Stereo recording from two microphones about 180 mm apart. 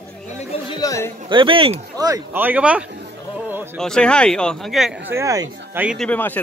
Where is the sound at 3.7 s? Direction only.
5° left (ahead or behind).